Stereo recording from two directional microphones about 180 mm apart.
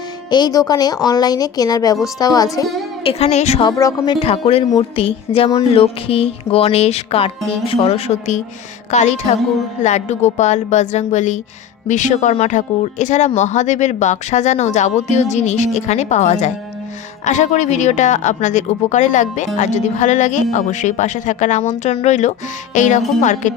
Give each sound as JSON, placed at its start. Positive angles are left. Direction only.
{"t": 0.3, "sound": "a woman's voice", "side_deg": 25}
{"t": 3.0, "sound": "speech", "side_deg": 35}
{"t": 3.7, "sound": "a woman's voice", "side_deg": 20}